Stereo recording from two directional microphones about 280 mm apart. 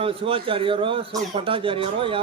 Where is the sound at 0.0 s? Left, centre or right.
Centre.